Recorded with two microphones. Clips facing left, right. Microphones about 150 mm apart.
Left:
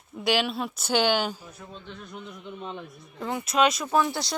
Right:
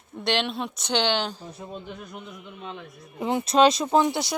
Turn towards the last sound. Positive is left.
turn(degrees=-20)  # may be behind; listen again after turning